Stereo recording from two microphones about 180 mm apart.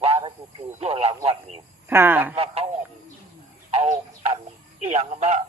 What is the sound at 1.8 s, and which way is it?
Speech, 10° right (ahead or behind).